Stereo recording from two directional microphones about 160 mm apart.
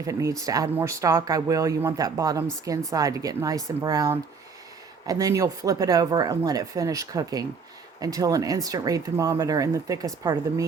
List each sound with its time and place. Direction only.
0.0 s speech: 20° right (ahead or behind)